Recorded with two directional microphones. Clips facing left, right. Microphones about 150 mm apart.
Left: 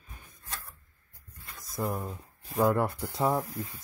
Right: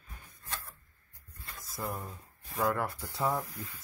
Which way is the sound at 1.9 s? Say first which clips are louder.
Left 5 dB; 30° left (ahead or behind).